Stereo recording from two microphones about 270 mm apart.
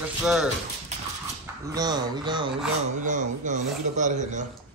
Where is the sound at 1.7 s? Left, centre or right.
Centre.